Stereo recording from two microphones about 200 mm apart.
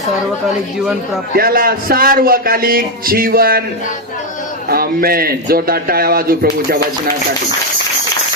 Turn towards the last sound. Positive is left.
turn(degrees=-50)  # may be behind; listen again after turning